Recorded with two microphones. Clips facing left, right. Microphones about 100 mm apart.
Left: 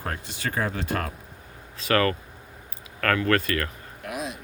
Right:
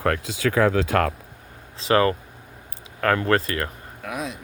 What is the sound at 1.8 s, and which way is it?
Speech, 25° right (ahead or behind).